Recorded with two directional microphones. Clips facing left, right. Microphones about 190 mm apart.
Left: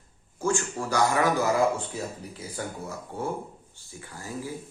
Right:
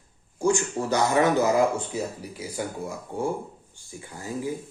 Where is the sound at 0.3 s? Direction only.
15° right (ahead or behind).